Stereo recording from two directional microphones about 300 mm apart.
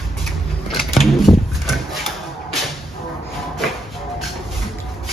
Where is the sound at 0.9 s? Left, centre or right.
Centre.